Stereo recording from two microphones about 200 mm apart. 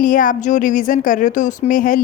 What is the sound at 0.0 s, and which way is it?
Speech, 40° left (ahead or behind).